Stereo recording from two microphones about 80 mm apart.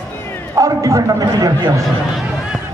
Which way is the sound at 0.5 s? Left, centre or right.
Right.